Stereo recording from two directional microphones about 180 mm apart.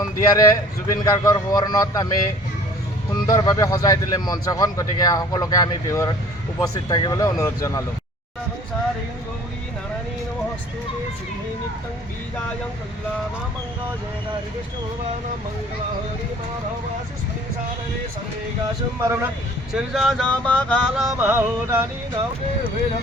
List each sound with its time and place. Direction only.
0.0 s speech: 20° left (ahead or behind)
3.1 s speech: 20° left (ahead or behind)
19.0 s speech: 15° right (ahead or behind)
19.7 s music: centre (ahead or behind)